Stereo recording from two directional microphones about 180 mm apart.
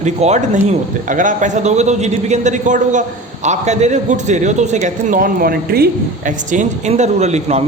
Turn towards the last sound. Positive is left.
turn(degrees=-40)  # may be behind; listen again after turning